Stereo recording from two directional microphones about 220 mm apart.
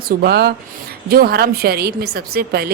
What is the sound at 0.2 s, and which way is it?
Speech, 45° right (ahead or behind).